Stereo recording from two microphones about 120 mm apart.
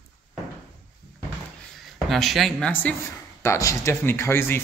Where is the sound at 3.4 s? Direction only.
25° left (ahead or behind).